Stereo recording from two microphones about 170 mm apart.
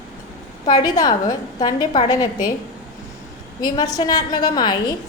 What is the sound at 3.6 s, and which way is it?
A woman's voice, 25° left (ahead or behind).